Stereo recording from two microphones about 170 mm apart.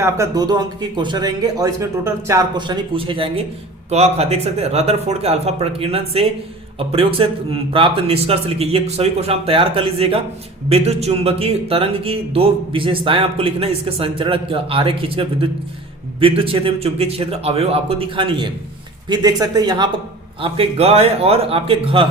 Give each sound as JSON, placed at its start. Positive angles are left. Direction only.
{"t": 0.0, "sound": "a man's voice", "side_deg": -20}
{"t": 20.4, "sound": "a man's voice", "side_deg": -35}